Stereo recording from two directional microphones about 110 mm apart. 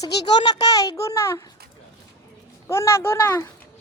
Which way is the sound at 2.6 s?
25° left (ahead or behind).